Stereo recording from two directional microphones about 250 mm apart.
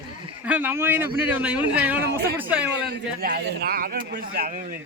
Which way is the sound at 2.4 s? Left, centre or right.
Centre.